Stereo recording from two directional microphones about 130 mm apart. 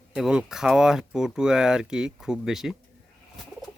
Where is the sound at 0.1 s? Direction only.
5° right (ahead or behind).